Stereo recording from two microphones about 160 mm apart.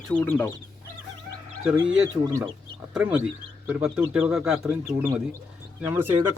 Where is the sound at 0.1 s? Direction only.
10° left (ahead or behind).